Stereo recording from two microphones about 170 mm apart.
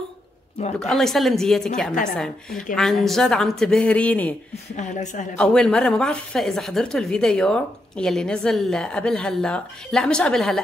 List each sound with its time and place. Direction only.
0.7 s a woman's voice: 5° left (ahead or behind)
4.7 s a woman's voice: 45° left (ahead or behind)
5.4 s a woman's voice: 5° left (ahead or behind)